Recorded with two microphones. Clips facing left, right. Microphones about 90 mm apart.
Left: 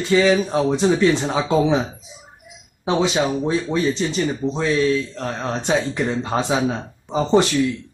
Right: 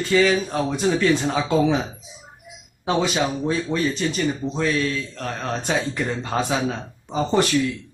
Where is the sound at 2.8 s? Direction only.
20° left (ahead or behind).